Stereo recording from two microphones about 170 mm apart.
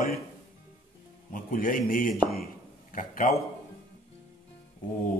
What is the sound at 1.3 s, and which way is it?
Speech, 55° left (ahead or behind).